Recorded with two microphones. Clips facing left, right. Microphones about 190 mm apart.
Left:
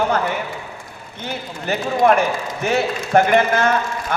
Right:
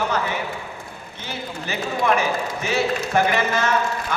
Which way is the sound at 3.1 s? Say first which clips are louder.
Left 8 dB; 55° left (ahead or behind).